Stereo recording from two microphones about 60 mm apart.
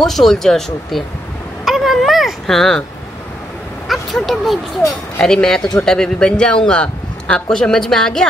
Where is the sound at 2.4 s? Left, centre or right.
Centre.